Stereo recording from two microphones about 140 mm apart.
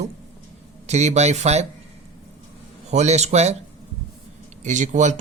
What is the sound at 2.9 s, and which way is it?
Speech, 50° right (ahead or behind).